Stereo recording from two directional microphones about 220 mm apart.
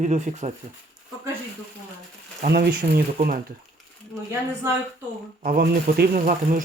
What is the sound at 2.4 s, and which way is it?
Speech, 45° right (ahead or behind).